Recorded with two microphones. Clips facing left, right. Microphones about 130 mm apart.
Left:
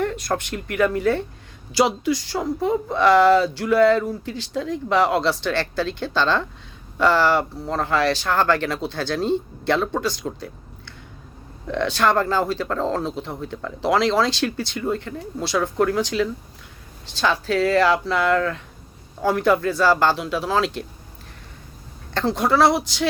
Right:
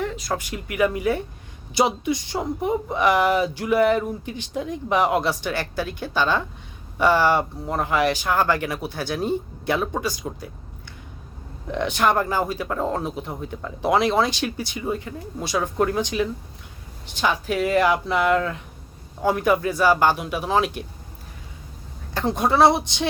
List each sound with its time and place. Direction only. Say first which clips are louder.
0.0 s speech: left 3 dB; centre (ahead or behind)
22.1 s speech: left 1 dB; 15° right (ahead or behind)